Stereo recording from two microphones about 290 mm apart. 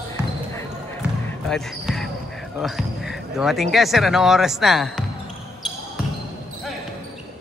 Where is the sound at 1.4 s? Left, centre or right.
Centre.